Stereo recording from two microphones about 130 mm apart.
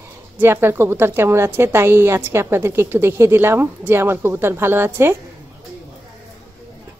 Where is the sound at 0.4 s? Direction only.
20° right (ahead or behind).